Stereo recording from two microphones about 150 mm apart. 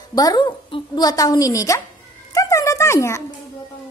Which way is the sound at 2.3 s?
20° left (ahead or behind).